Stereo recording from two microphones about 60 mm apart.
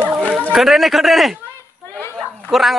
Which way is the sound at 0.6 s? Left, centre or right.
Centre.